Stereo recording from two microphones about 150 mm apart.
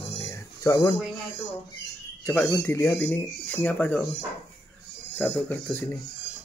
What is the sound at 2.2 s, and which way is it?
Speech, 10° left (ahead or behind).